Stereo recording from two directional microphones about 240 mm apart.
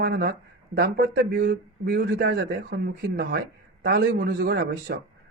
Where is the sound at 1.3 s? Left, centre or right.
Right.